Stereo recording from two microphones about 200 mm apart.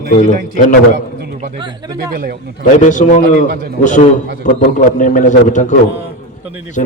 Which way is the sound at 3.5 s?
50° right (ahead or behind).